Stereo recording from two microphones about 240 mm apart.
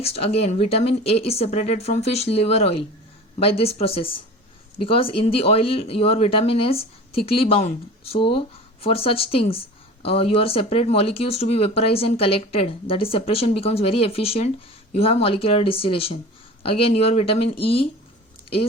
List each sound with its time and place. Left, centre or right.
0.0 s speech: left